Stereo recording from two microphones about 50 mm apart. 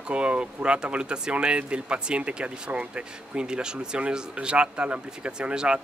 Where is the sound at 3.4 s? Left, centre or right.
Centre.